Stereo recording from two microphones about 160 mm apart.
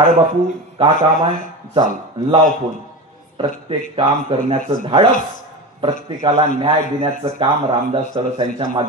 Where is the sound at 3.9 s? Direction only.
35° right (ahead or behind).